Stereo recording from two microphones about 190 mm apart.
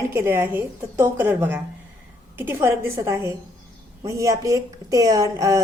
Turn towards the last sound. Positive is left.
turn(degrees=-15)  # may be behind; listen again after turning